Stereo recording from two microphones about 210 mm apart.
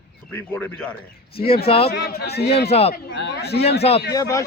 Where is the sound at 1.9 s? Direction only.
50° left (ahead or behind).